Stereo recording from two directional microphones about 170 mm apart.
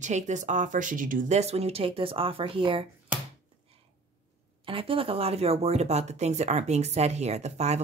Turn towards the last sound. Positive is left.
turn(degrees=-40)  # may be behind; listen again after turning